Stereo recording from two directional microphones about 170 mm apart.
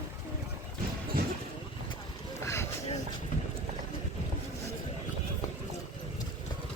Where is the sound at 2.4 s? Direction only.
15° left (ahead or behind).